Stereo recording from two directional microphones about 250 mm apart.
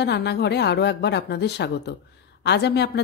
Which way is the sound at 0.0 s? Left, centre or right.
Left.